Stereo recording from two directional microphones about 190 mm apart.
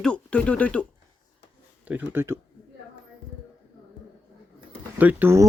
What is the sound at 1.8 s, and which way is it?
Speech, 10° right (ahead or behind).